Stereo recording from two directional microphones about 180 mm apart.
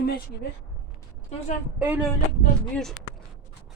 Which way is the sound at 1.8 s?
10° right (ahead or behind).